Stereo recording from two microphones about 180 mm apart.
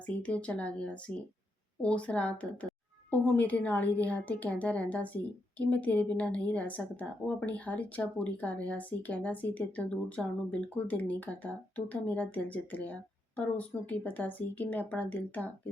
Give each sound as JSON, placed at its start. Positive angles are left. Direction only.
{"t": 0.0, "sound": "a woman's voice", "side_deg": 5}